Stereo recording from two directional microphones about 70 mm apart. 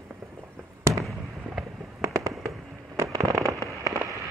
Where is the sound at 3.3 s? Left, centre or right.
Right.